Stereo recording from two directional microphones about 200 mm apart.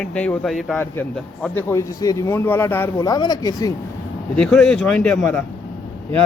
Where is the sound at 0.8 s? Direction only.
10° left (ahead or behind).